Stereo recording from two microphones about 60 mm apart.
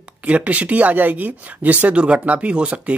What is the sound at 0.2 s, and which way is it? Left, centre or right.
Speech, right.